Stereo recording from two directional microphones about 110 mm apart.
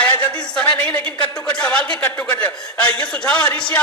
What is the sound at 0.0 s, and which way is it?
A man's voice, 10° left (ahead or behind).